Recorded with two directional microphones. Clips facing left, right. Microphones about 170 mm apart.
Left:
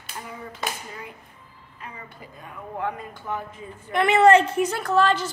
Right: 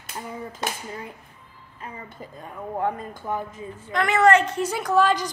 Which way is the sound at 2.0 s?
40° right (ahead or behind).